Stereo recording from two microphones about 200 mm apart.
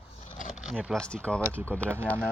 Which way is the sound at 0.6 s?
5° right (ahead or behind).